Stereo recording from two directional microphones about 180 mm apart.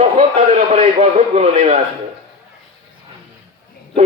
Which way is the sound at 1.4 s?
40° right (ahead or behind).